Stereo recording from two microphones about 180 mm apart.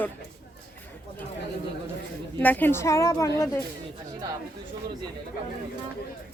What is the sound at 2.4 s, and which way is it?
Speech, 10° left (ahead or behind).